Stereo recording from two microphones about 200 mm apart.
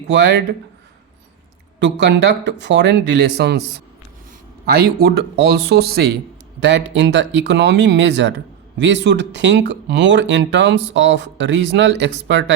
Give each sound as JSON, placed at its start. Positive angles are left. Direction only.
{"t": 0.1, "sound": "speech", "side_deg": -60}
{"t": 1.8, "sound": "speech", "side_deg": -60}